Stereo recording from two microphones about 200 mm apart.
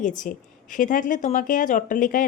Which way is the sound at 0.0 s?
40° left (ahead or behind).